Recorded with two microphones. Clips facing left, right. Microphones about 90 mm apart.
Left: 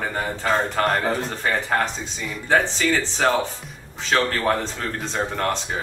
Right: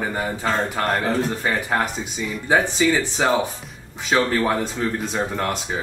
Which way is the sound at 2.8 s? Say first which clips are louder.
Right 2 dB; 10° right (ahead or behind).